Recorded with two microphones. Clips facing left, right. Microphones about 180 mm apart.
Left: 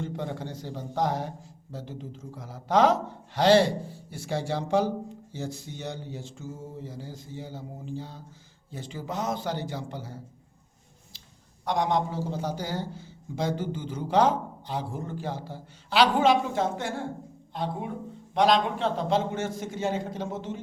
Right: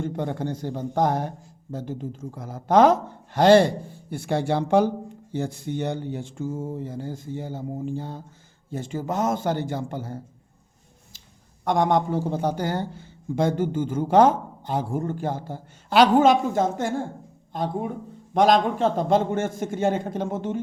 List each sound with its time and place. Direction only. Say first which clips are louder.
0.0 s a man's voice: right 6 dB; 50° right (ahead or behind)
11.6 s a man's voice: right 5 dB; 50° right (ahead or behind)